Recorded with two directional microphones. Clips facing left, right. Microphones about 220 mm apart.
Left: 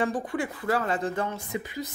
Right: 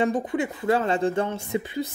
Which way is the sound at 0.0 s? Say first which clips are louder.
Right 4 dB; 20° right (ahead or behind).